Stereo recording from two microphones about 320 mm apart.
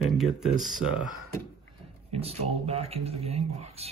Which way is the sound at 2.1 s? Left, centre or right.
Centre.